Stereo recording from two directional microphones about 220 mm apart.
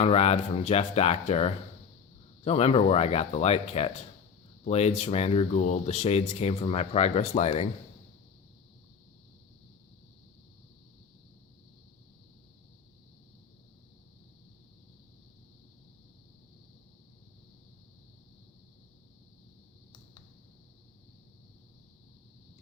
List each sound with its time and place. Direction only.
0.0 s speech: 30° left (ahead or behind)